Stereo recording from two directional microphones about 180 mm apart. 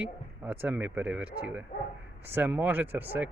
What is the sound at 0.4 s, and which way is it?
Speech, 10° right (ahead or behind).